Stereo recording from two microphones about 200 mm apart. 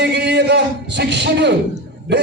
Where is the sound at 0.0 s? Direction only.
60° right (ahead or behind).